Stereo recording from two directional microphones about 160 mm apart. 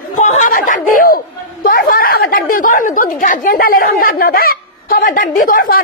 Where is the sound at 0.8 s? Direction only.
60° left (ahead or behind).